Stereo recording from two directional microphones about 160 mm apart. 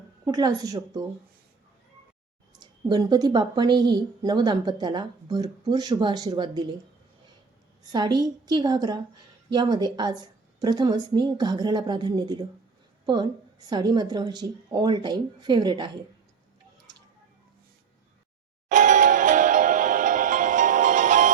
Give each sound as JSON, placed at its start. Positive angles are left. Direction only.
{"t": 0.3, "sound": "speech", "side_deg": -25}
{"t": 2.6, "sound": "speech", "side_deg": -25}
{"t": 7.9, "sound": "speech", "side_deg": -25}
{"t": 13.7, "sound": "speech", "side_deg": -25}
{"t": 18.7, "sound": "music", "side_deg": -55}